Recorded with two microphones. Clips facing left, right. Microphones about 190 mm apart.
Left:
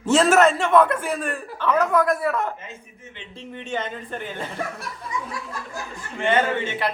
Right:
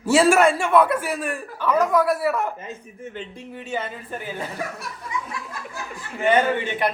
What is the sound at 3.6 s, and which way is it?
Speech, 5° right (ahead or behind).